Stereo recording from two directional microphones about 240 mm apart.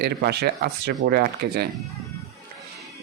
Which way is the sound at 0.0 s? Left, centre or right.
Right.